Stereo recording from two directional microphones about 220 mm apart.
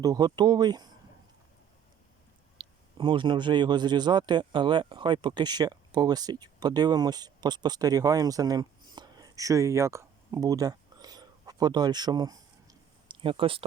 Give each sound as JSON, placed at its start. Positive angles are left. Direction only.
{"t": 0.0, "sound": "speech", "side_deg": -15}
{"t": 2.6, "sound": "speech", "side_deg": -20}